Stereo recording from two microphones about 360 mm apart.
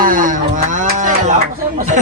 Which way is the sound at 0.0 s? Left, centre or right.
Right.